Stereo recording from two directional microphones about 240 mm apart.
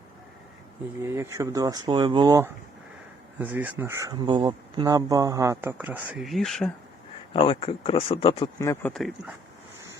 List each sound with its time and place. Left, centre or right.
1.0 s speech: centre
7.3 s speech: left; by 9.3 s centre